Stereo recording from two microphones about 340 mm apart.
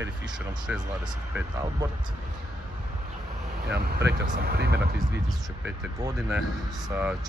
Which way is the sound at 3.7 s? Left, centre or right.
Right.